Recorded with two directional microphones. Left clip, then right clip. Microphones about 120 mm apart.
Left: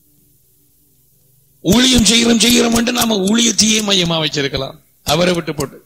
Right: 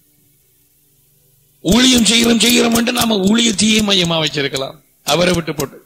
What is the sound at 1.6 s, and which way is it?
A man's voice, 55° left (ahead or behind).